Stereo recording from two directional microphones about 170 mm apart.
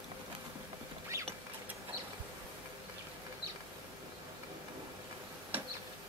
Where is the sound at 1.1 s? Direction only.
15° right (ahead or behind).